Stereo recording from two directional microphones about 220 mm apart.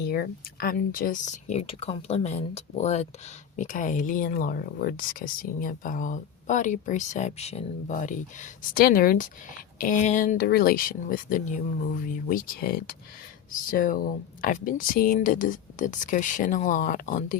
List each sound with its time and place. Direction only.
0.0 s speech: 45° left (ahead or behind)